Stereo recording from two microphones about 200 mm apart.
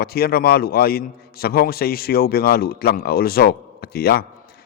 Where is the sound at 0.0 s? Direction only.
50° left (ahead or behind).